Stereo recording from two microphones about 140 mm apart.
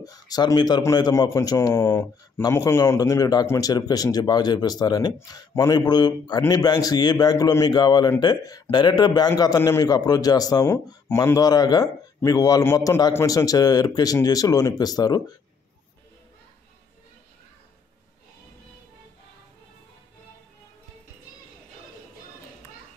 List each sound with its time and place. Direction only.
0.0 s a man's voice: 25° left (ahead or behind)